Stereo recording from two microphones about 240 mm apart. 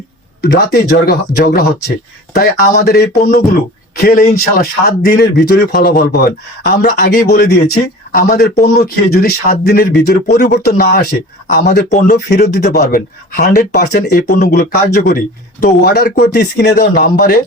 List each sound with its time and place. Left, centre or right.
0.4 s speech: left